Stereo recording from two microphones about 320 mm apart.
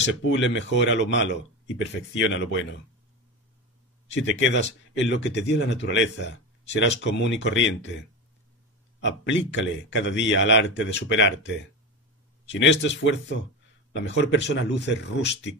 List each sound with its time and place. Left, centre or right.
0.0 s speech: left
4.1 s speech: left
9.0 s speech: left